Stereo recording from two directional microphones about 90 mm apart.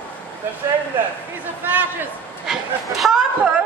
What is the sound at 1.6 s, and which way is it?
Speech, 20° right (ahead or behind).